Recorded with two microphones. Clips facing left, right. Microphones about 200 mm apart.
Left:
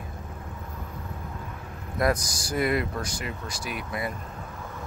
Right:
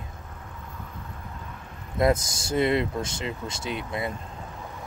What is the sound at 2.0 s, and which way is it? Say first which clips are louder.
Speech: right 3 dB; 25° right (ahead or behind).